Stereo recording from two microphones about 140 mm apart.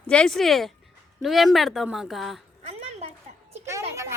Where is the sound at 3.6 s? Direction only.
20° right (ahead or behind).